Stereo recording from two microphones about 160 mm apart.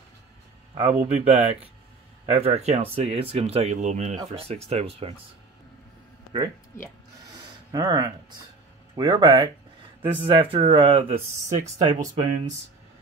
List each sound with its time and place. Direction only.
0.7 s speech: 45° right (ahead or behind)
4.3 s speech: 35° right (ahead or behind)
7.7 s speech: 20° right (ahead or behind)
11.6 s speech: 25° right (ahead or behind)